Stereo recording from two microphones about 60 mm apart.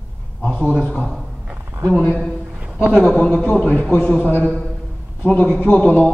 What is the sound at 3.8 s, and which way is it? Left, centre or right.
Speech, left.